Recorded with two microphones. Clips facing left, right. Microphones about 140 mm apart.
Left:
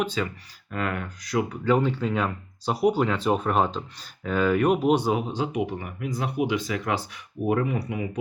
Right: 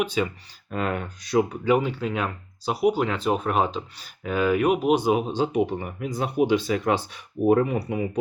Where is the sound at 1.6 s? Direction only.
10° right (ahead or behind).